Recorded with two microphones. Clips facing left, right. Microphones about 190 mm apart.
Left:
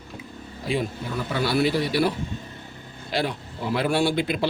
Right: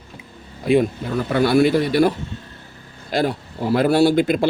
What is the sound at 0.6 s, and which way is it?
Speech, 55° right (ahead or behind).